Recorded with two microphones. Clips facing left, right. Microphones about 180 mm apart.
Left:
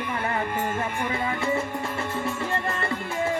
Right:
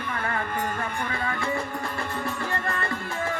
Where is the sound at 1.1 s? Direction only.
25° left (ahead or behind).